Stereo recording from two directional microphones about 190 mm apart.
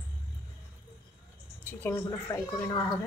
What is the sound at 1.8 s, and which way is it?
Speech, 15° left (ahead or behind).